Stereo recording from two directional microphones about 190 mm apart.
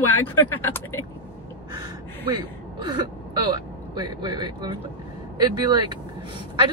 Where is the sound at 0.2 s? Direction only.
10° left (ahead or behind).